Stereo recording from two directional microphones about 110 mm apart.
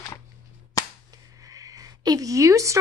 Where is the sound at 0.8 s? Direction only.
30° left (ahead or behind).